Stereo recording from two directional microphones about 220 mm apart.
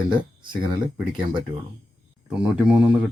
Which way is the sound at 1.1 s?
20° right (ahead or behind).